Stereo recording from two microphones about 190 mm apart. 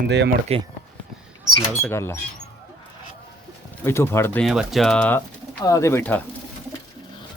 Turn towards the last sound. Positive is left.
turn(degrees=10)  # may be behind; listen again after turning